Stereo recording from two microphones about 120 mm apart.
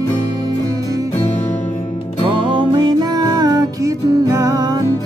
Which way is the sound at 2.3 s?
45° right (ahead or behind).